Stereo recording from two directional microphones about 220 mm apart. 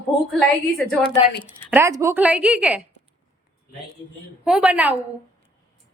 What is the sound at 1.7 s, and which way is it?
A woman's voice, 10° right (ahead or behind).